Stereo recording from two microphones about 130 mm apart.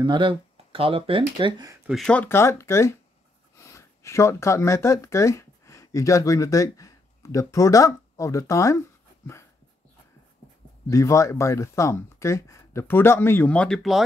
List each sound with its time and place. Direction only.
0.0 s speech: 40° right (ahead or behind)
1.9 s speech: 5° left (ahead or behind); by 9.5 s 20° left (ahead or behind)
10.9 s speech: 25° left (ahead or behind); by 14.0 s centre (ahead or behind)